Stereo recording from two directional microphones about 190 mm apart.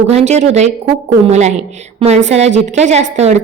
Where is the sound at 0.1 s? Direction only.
35° right (ahead or behind).